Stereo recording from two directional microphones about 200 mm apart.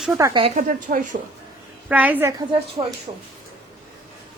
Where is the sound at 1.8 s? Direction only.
5° right (ahead or behind).